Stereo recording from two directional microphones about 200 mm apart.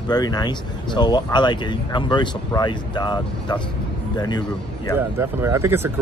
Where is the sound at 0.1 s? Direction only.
20° left (ahead or behind).